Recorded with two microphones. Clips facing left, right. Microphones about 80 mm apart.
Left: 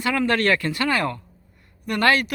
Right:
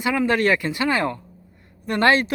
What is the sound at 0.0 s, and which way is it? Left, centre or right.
Speech, centre.